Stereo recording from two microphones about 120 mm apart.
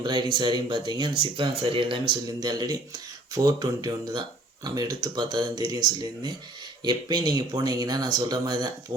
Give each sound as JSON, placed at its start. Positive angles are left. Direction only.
{"t": 0.0, "sound": "speech", "side_deg": -40}